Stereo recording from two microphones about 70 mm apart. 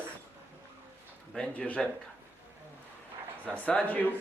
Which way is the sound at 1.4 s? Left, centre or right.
Centre.